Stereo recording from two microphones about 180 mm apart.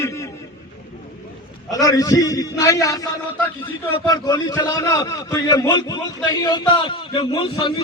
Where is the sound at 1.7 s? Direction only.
20° left (ahead or behind).